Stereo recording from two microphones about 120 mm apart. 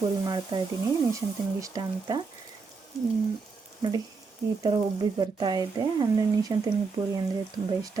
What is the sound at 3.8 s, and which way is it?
Speech, 30° right (ahead or behind).